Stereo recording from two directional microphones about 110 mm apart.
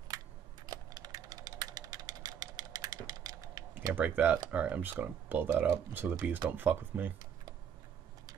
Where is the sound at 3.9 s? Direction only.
15° right (ahead or behind).